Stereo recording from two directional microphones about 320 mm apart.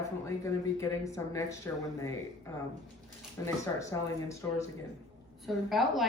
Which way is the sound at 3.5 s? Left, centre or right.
Centre.